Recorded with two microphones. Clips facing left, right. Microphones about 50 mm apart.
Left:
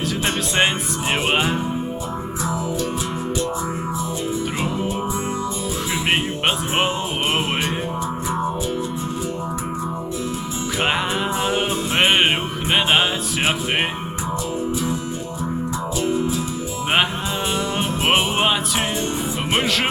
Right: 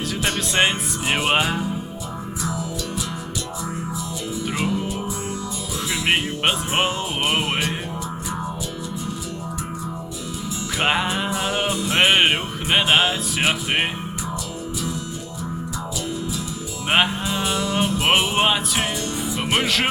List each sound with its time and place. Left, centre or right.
1.4 s music: left
6.1 s music: centre
7.3 s music: left
10.8 s music: centre
11.3 s music: left
11.9 s music: centre
17.5 s music: left
18.3 s music: centre
19.6 s speech: centre